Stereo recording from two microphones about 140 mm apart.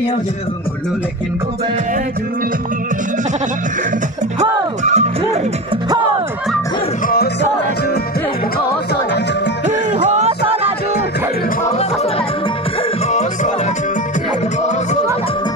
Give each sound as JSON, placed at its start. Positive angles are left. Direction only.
{"t": 4.4, "sound": "music", "side_deg": -50}
{"t": 10.0, "sound": "music", "side_deg": -55}